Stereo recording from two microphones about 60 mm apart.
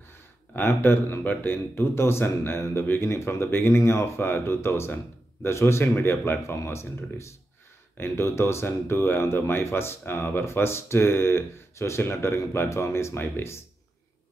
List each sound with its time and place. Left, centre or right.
0.5 s speech: left